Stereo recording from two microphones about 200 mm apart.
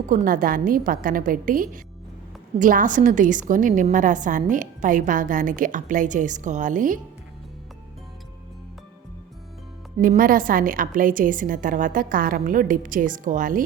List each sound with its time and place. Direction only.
0.1 s a woman's voice: 45° right (ahead or behind)
10.0 s a woman's voice: 45° right (ahead or behind)